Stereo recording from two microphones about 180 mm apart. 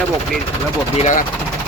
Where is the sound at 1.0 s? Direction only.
40° left (ahead or behind).